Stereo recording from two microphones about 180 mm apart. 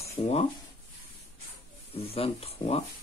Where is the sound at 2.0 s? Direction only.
35° left (ahead or behind).